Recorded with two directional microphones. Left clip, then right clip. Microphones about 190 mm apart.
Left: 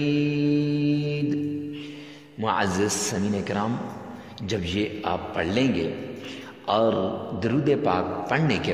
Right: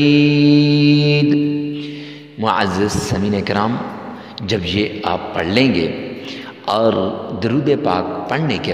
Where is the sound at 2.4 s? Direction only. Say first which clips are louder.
Right 7 dB; 30° right (ahead or behind).